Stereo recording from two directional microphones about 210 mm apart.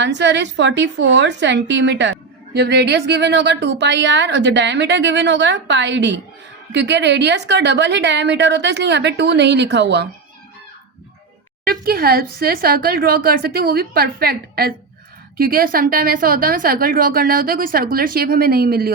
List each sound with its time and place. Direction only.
0.0 s a woman's voice: 55° right (ahead or behind)
11.6 s a woman's voice: 45° right (ahead or behind)